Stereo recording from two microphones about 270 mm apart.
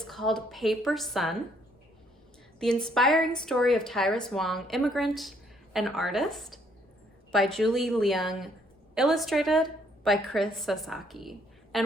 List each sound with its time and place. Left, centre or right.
0.0 s a woman's voice: centre
2.6 s a woman's voice: centre